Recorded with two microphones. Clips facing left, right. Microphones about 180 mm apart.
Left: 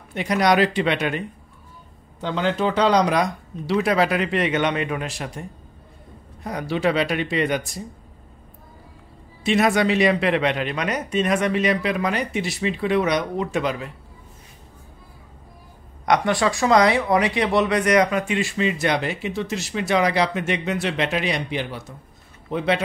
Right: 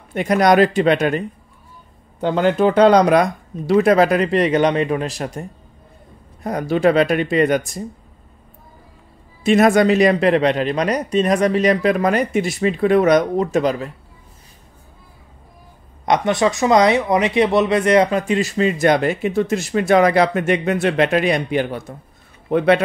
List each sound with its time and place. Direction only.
0.1 s speech: 50° right (ahead or behind)
9.4 s speech: 50° right (ahead or behind)
16.1 s speech: 20° right (ahead or behind); by 22.8 s 55° right (ahead or behind)